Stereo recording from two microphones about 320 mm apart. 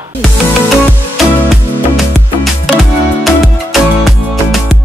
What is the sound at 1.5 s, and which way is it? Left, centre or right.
Music, centre.